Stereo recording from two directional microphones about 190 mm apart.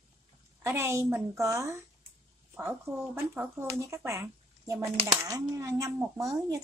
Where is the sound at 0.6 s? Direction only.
15° right (ahead or behind).